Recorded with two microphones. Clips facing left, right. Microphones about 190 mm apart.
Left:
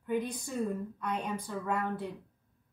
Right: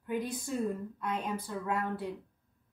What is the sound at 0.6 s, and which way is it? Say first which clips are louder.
A woman's voice: even; centre (ahead or behind).